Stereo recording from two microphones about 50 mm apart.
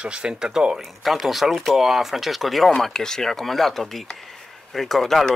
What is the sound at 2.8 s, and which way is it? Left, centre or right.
Speech, centre.